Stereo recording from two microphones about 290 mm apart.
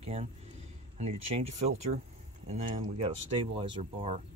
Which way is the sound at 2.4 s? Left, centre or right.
Right.